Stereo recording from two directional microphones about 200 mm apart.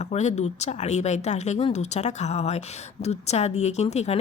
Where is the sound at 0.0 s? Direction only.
35° left (ahead or behind).